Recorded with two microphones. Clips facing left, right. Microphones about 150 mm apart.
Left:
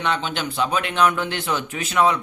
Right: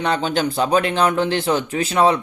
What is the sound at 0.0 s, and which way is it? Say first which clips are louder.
A man's voice: right 5 dB; 35° right (ahead or behind).